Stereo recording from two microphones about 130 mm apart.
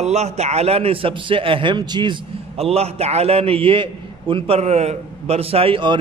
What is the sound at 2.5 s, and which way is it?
A man's voice, 50° right (ahead or behind).